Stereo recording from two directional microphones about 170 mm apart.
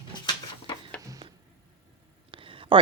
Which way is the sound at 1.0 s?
20° right (ahead or behind).